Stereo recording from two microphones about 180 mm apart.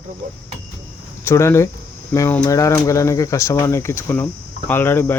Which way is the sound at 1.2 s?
15° left (ahead or behind).